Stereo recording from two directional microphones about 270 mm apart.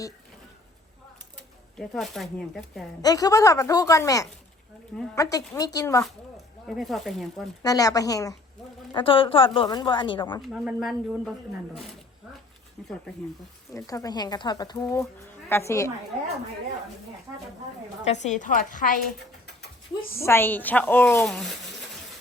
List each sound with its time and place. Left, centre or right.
1.8 s speech: centre
3.0 s speech: centre
6.1 s speech: centre
7.6 s a woman's voice: centre
10.4 s speech: centre
13.7 s speech: centre
18.0 s a woman's voice: left
20.2 s speech: centre